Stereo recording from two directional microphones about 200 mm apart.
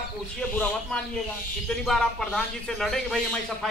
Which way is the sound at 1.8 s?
Centre (ahead or behind).